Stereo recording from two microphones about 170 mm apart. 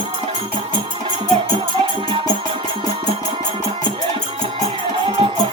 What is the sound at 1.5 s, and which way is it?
Music, 30° right (ahead or behind).